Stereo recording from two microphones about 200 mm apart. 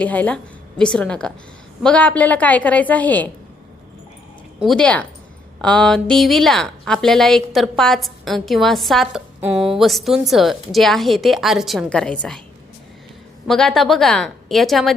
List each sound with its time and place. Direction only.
0.0 s a woman's voice: 5° left (ahead or behind)
4.6 s a woman's voice: 5° left (ahead or behind)
13.5 s a woman's voice: centre (ahead or behind)